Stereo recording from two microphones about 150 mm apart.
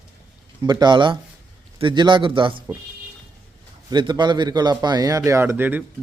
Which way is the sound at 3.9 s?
30° right (ahead or behind).